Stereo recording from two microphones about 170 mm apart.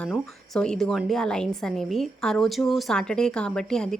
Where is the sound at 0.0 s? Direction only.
5° left (ahead or behind).